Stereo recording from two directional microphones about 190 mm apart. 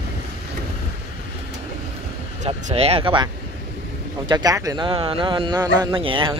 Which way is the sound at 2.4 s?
30° right (ahead or behind).